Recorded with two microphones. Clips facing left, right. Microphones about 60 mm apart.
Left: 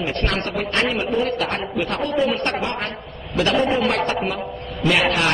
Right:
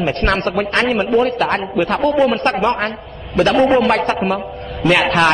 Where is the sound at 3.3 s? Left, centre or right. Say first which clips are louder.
Right 6 dB; right.